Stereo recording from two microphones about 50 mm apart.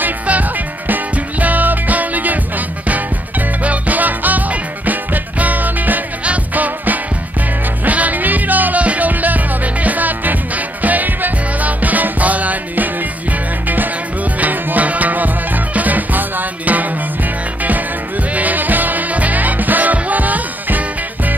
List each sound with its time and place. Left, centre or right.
0.0 s music: right
14.4 s music: right
18.3 s music: right